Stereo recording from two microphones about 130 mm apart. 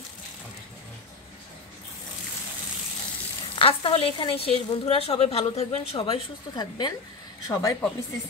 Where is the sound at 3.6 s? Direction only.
45° left (ahead or behind).